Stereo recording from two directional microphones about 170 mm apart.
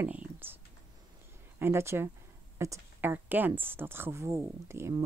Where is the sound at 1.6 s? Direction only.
15° right (ahead or behind).